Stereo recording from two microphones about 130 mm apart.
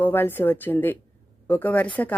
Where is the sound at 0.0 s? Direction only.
15° left (ahead or behind).